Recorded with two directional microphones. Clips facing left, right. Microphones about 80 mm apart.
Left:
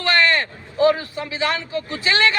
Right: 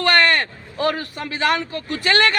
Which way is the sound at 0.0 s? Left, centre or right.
Right.